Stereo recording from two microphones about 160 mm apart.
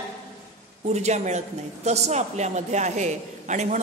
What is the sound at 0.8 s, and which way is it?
A woman's voice, 45° right (ahead or behind).